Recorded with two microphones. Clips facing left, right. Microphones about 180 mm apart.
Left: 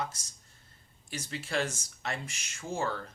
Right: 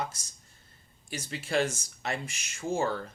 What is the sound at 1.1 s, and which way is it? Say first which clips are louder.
Speech: right 3 dB; 15° right (ahead or behind).